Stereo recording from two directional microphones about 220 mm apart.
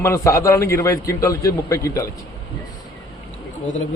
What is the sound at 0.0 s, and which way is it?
A man's voice, 10° left (ahead or behind).